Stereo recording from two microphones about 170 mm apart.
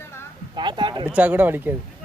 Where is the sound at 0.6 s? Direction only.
25° right (ahead or behind).